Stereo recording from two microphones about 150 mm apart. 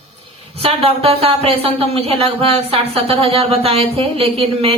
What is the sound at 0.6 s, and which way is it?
Speech, 40° right (ahead or behind).